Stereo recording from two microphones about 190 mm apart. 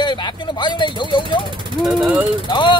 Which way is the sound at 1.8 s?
5° right (ahead or behind).